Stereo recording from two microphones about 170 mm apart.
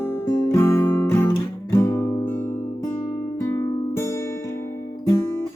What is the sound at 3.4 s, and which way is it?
Music, 15° left (ahead or behind).